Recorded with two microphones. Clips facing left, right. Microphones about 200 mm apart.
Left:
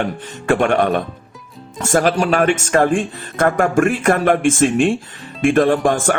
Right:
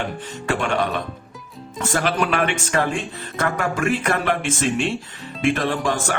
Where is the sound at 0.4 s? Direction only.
55° left (ahead or behind).